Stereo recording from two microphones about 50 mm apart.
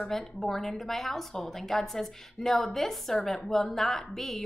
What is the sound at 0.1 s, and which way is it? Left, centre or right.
A woman's voice, centre.